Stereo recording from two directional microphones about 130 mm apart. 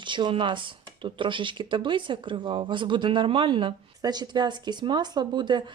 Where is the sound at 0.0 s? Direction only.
40° right (ahead or behind).